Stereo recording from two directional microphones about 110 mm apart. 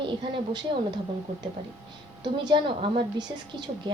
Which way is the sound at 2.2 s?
45° right (ahead or behind).